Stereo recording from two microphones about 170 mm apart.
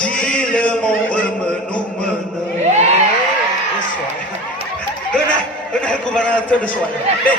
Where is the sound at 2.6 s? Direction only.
40° right (ahead or behind).